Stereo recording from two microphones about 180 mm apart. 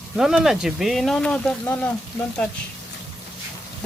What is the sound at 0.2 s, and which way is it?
Speech, 5° right (ahead or behind).